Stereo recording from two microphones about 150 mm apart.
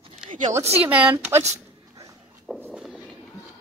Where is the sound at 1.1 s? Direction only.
20° right (ahead or behind).